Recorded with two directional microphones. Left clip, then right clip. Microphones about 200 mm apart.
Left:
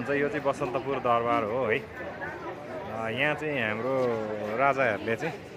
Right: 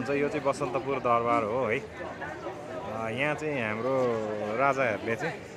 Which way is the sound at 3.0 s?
10° right (ahead or behind).